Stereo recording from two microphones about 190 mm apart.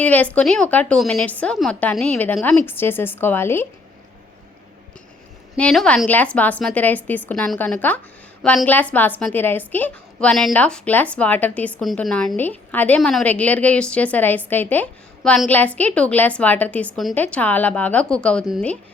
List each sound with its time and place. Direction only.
0.0 s a woman's voice: 5° left (ahead or behind)
5.5 s a woman's voice: 5° left (ahead or behind)